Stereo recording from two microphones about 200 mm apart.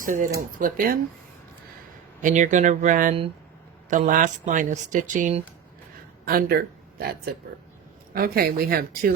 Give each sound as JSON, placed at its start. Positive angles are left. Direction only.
{"t": 0.0, "sound": "speech", "side_deg": -40}
{"t": 2.2, "sound": "speech", "side_deg": -40}
{"t": 6.2, "sound": "speech", "side_deg": -50}